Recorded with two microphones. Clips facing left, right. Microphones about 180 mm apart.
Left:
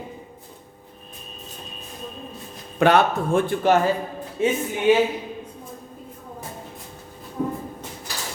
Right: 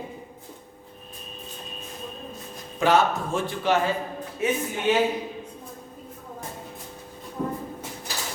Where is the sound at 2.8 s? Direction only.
65° left (ahead or behind).